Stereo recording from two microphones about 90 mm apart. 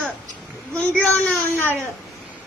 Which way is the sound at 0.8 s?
15° left (ahead or behind).